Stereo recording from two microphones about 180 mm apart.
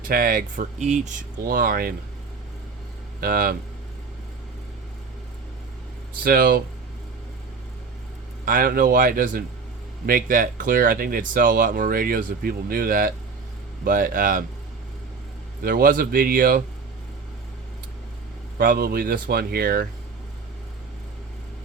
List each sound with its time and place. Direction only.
0.1 s speech: 55° right (ahead or behind)
1.4 s speech: 55° right (ahead or behind)
3.2 s speech: 55° right (ahead or behind)
6.2 s speech: 55° right (ahead or behind)
8.4 s speech: 50° right (ahead or behind)
15.6 s speech: 50° right (ahead or behind)
18.5 s speech: 55° right (ahead or behind)